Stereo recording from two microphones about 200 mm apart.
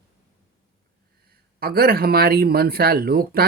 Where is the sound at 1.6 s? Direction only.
50° right (ahead or behind).